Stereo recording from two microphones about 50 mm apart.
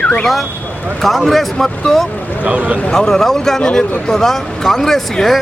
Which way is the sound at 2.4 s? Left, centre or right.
Right.